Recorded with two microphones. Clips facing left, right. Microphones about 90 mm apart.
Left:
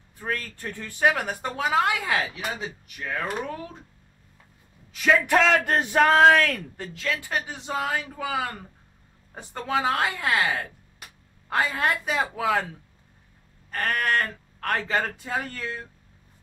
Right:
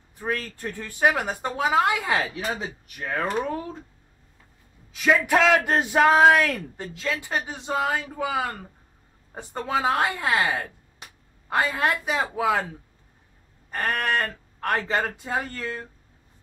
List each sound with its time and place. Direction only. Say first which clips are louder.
0.2 s speech: right 2 dB; 5° right (ahead or behind)
2.6 s speech: right 1 dB; 35° right (ahead or behind)
4.9 s speech: even; 5° right (ahead or behind)
8.3 s speech: even; 5° right (ahead or behind)
13.7 s a sound: right 1 dB; 15° right (ahead or behind)
13.9 s speech: left 2 dB; 10° right (ahead or behind)